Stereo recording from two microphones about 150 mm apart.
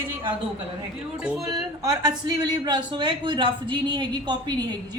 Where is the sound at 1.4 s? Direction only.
25° right (ahead or behind).